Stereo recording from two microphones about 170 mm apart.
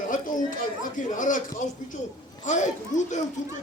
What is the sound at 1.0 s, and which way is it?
Speech, 50° left (ahead or behind).